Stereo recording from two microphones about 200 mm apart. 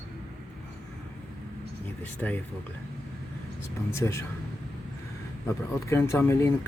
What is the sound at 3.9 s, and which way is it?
Speech, 15° left (ahead or behind).